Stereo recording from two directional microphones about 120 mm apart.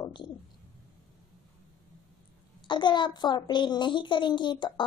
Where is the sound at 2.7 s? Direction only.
40° left (ahead or behind).